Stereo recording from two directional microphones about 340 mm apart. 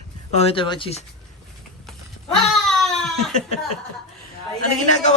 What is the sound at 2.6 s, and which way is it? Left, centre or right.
Baby cry, centre.